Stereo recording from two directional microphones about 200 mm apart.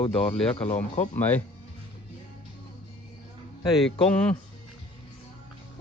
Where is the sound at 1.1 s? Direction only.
10° left (ahead or behind).